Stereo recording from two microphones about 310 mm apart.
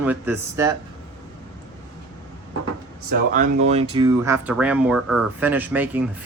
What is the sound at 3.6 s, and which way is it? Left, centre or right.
Speech, right.